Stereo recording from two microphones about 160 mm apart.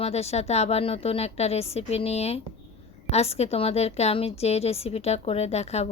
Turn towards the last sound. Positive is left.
turn(degrees=40)  # may be behind; listen again after turning